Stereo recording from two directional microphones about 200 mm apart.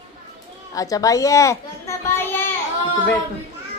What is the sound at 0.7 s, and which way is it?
A child's voice, 15° left (ahead or behind).